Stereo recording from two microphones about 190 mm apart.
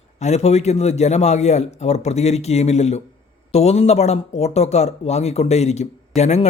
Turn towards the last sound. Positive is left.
turn(degrees=35)  # may be behind; listen again after turning